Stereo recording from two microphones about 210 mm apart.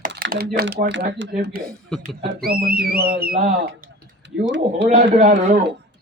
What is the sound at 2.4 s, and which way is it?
Speech, 45° right (ahead or behind).